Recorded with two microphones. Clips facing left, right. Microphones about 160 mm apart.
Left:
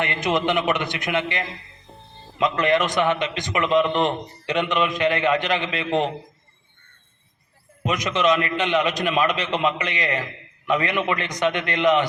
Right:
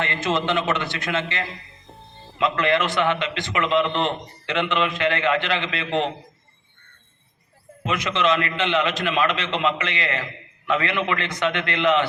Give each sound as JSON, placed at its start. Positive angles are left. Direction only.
{"t": 0.0, "sound": "a man's voice", "side_deg": 15}
{"t": 7.9, "sound": "a man's voice", "side_deg": 15}